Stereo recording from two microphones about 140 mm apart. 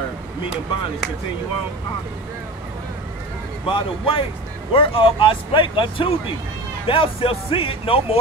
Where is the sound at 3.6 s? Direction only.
40° left (ahead or behind).